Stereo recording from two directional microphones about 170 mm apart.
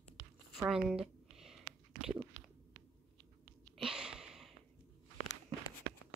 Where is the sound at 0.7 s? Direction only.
5° right (ahead or behind).